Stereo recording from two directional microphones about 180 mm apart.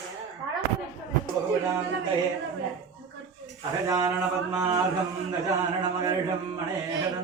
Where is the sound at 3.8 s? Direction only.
20° right (ahead or behind).